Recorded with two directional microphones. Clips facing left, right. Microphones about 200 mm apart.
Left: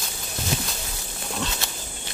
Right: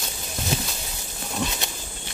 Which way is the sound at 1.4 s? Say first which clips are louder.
Right 3 dB; 15° right (ahead or behind).